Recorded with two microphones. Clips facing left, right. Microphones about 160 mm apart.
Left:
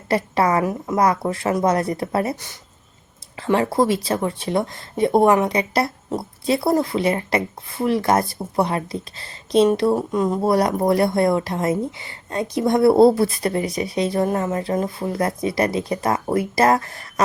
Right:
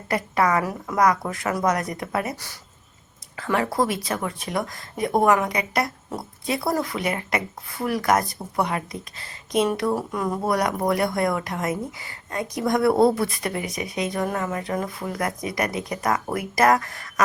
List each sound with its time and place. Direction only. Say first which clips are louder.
0.1 s speech: left 3 dB; 30° left (ahead or behind)